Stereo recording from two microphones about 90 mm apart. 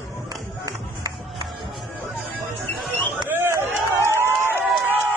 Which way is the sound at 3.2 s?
25° right (ahead or behind).